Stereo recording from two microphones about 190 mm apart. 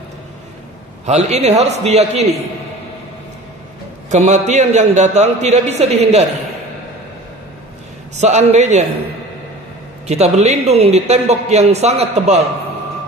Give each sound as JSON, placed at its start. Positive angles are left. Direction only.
{"t": 1.0, "sound": "speech", "side_deg": -35}
{"t": 4.1, "sound": "speech", "side_deg": -35}
{"t": 8.2, "sound": "speech", "side_deg": -35}
{"t": 10.0, "sound": "speech", "side_deg": -35}